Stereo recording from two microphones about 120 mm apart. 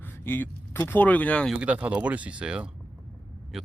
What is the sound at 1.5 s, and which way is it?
Speech, 10° right (ahead or behind).